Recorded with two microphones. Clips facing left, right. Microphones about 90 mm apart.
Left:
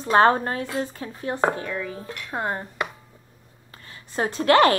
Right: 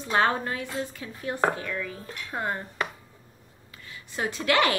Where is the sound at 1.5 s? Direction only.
25° left (ahead or behind).